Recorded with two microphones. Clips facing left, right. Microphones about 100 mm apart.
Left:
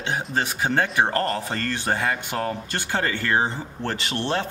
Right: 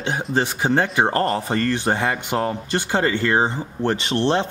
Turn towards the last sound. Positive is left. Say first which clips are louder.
# right 6 dB
turn(degrees=-20)  # may be behind; listen again after turning